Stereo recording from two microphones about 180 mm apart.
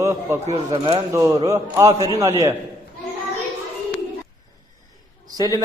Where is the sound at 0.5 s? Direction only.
25° right (ahead or behind).